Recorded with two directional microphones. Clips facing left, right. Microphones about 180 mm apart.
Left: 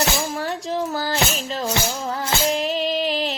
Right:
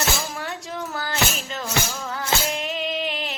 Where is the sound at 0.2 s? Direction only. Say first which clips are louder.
Left 5 dB; 30° left (ahead or behind).